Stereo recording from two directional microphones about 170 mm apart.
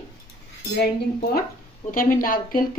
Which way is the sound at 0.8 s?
65° left (ahead or behind).